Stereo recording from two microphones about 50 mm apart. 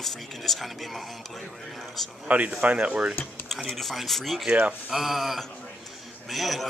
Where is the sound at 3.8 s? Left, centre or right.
Centre.